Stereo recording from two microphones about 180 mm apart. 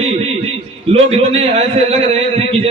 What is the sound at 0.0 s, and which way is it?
A man's voice, 35° right (ahead or behind).